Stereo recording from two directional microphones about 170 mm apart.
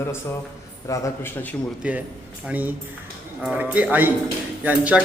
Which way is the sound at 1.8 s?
10° right (ahead or behind).